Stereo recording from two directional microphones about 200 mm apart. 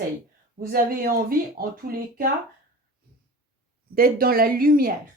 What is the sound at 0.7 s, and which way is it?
Speech, 45° right (ahead or behind).